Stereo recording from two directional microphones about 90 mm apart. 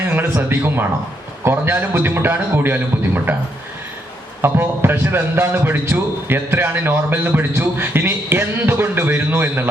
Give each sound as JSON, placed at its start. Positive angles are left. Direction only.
{"t": 0.1, "sound": "a man's voice", "side_deg": -25}